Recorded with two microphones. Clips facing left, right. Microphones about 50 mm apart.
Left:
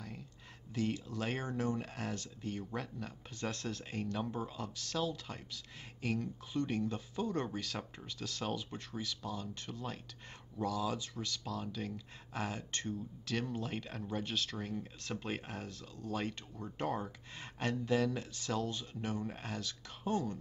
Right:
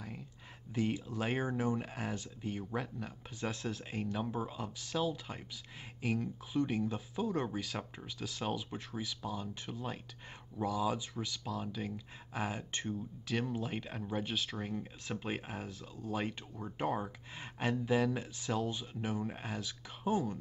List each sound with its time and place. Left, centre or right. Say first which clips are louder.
0.7 s speech: right 2 dB; centre